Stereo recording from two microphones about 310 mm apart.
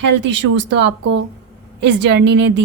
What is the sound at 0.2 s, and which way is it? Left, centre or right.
A woman's voice, right.